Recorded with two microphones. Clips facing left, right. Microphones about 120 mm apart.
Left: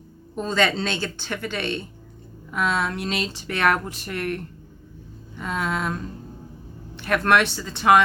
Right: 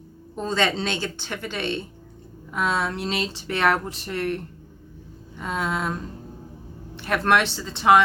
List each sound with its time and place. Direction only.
0.4 s speech: 25° right (ahead or behind)
5.4 s speech: 25° right (ahead or behind)
7.0 s speech: 25° right (ahead or behind)